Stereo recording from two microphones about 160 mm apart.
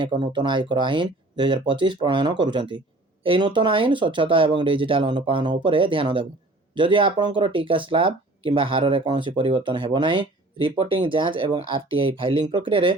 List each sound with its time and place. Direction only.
0.0 s speech: 30° right (ahead or behind)